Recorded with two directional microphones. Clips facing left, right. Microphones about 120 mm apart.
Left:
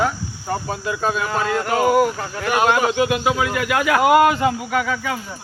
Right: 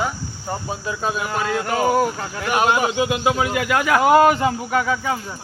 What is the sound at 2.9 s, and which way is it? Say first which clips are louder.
Speech: left 1 dB; 25° right (ahead or behind).